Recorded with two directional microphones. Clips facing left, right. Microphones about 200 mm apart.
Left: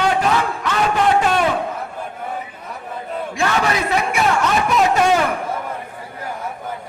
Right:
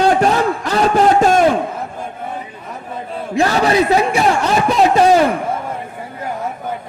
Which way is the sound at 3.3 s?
35° right (ahead or behind).